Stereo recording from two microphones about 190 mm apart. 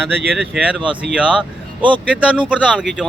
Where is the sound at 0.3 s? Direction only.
5° right (ahead or behind).